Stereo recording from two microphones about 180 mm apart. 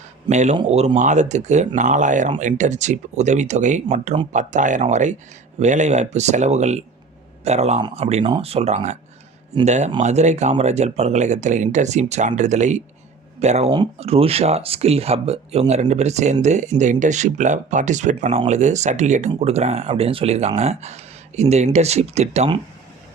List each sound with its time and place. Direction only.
0.3 s speech: 40° right (ahead or behind)
7.8 s speech: 25° right (ahead or behind)
13.7 s speech: 30° right (ahead or behind)